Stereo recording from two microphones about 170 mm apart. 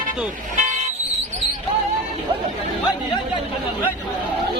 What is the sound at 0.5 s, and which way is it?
Vehicle, 45° right (ahead or behind).